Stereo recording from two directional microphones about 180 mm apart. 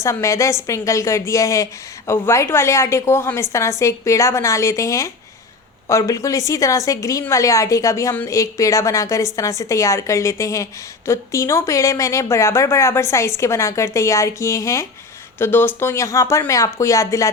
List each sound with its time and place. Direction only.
0.0 s a woman's voice: 15° left (ahead or behind)